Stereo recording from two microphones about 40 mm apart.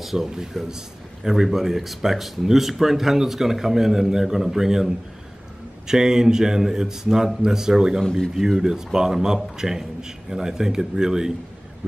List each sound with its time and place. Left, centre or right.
0.0 s speech: centre
8.0 s speech: centre
8.4 s speech: centre